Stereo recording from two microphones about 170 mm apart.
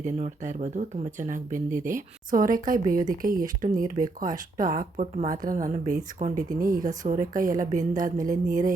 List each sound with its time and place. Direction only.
0.0 s speech: 45° right (ahead or behind)